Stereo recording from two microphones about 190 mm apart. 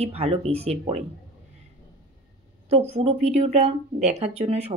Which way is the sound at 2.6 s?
30° right (ahead or behind).